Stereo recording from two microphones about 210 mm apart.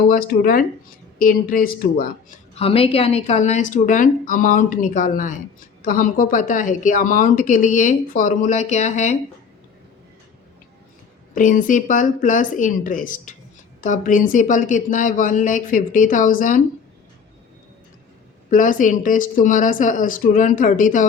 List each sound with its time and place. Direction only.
0.1 s speech: 45° left (ahead or behind)
2.6 s a woman's voice: 25° left (ahead or behind)
11.3 s a woman's voice: 40° left (ahead or behind)
18.5 s a woman's voice: 40° left (ahead or behind)